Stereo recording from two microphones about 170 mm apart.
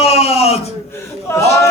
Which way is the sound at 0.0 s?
40° left (ahead or behind).